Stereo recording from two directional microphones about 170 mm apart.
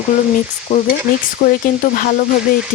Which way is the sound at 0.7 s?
40° left (ahead or behind).